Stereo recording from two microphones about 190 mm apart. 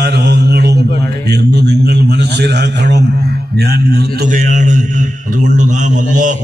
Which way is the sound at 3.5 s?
60° right (ahead or behind).